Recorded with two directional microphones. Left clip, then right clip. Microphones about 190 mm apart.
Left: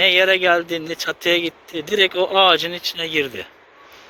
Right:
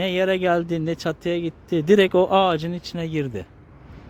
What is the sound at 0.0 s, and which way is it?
Speech, 15° right (ahead or behind).